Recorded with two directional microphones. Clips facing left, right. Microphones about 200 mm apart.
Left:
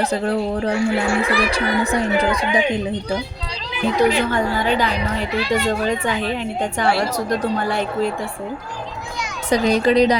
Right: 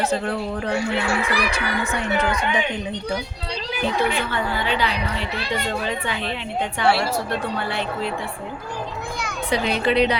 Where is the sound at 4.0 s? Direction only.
40° left (ahead or behind).